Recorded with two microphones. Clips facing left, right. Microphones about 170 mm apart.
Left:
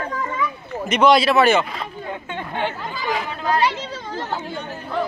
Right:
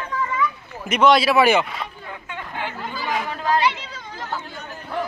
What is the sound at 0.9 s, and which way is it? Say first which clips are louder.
Speech: left 1 dB; 5° right (ahead or behind).